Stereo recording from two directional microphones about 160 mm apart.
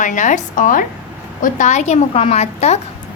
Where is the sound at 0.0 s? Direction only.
50° left (ahead or behind).